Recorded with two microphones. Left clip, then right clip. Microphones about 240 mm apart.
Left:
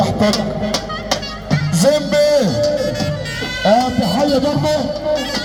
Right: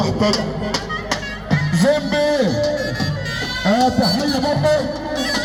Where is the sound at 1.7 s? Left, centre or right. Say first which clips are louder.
Left 4 dB; left.